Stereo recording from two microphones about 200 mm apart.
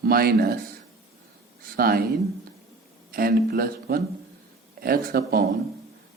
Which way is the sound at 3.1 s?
50° right (ahead or behind).